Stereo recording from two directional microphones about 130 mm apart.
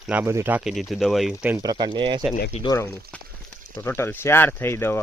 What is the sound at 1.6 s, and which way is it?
Speech, 30° right (ahead or behind).